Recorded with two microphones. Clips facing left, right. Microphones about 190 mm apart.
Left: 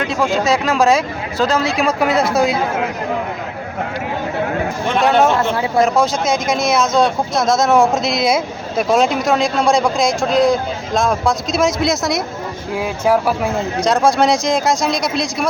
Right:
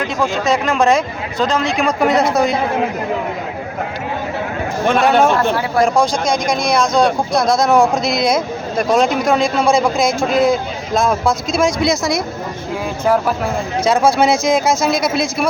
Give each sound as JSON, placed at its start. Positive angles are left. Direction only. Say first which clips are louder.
{"t": 0.2, "sound": "speech", "louder": "left 1 dB", "side_deg": 0}
{"t": 4.9, "sound": "speech", "louder": "even", "side_deg": 0}
{"t": 5.4, "sound": "speech", "louder": "even", "side_deg": 25}
{"t": 5.8, "sound": "speech", "louder": "right 1 dB", "side_deg": 5}
{"t": 13.1, "sound": "speech", "louder": "even", "side_deg": 10}
{"t": 13.8, "sound": "speech", "louder": "right 1 dB", "side_deg": 0}